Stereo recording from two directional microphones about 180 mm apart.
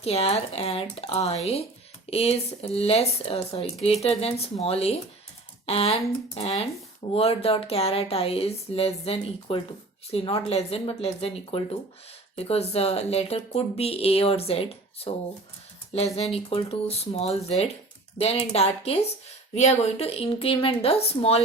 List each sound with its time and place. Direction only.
0.0 s speech: 35° left (ahead or behind)